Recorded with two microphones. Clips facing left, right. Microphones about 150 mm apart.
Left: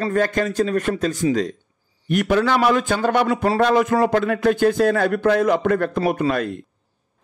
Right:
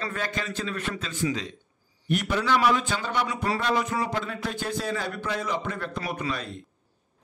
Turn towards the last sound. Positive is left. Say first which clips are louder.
# left 11 dB
turn(degrees=55)  # may be behind; listen again after turning